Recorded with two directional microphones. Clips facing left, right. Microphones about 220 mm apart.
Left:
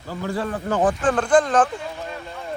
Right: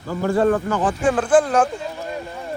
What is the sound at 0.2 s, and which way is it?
Speech, 50° right (ahead or behind).